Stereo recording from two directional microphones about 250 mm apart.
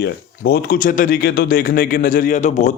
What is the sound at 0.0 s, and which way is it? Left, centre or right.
Speech, left.